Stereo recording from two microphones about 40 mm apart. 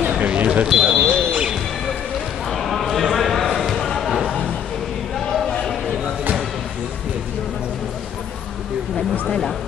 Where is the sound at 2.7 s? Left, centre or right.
Centre.